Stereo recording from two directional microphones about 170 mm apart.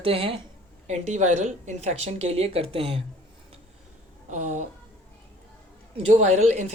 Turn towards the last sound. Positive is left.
turn(degrees=-40)  # may be behind; listen again after turning